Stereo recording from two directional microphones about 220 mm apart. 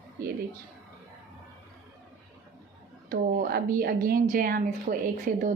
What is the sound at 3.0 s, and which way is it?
A woman's voice, 40° right (ahead or behind).